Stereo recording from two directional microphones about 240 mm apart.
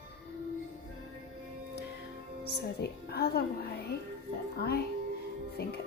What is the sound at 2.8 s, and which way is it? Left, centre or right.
Speech, left.